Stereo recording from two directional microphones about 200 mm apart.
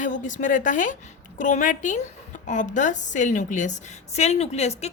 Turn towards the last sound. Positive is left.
turn(degrees=35)  # may be behind; listen again after turning